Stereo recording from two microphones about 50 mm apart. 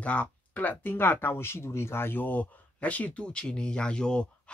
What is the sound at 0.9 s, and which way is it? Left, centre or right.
Speech, left.